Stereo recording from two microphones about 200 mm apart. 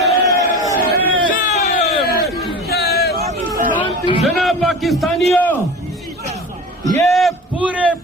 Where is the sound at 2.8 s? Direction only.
55° left (ahead or behind).